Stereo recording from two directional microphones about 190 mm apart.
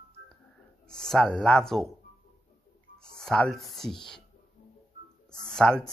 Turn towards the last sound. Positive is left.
turn(degrees=5)  # may be behind; listen again after turning